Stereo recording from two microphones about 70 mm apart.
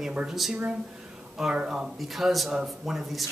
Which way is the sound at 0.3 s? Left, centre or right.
Centre.